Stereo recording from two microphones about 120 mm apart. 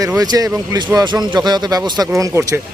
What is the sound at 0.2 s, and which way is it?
Speech, 30° right (ahead or behind).